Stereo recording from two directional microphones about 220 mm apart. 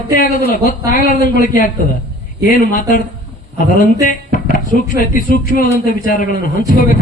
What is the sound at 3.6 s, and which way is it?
Speech, 35° left (ahead or behind).